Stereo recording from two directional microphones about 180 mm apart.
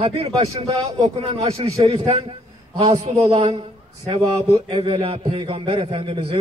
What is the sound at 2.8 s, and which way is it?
Speech, 15° right (ahead or behind).